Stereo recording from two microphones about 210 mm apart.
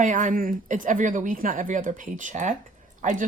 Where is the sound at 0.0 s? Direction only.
35° right (ahead or behind).